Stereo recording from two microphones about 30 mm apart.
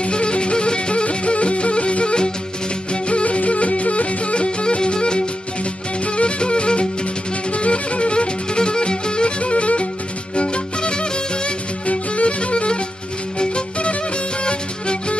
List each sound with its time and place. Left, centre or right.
0.0 s music: left
11.9 s music: left
14.4 s music: left